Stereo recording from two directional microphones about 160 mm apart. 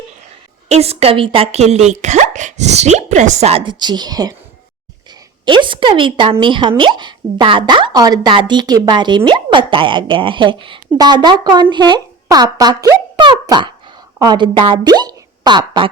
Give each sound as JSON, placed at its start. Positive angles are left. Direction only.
{"t": 0.7, "sound": "speech", "side_deg": -40}
{"t": 5.5, "sound": "a woman's voice", "side_deg": -30}